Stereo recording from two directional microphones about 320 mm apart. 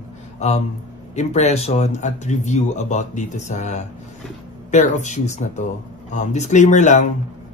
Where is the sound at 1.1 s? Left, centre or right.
Left.